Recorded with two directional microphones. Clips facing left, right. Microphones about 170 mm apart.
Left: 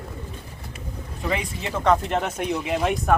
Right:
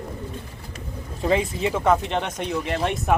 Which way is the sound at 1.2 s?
30° right (ahead or behind).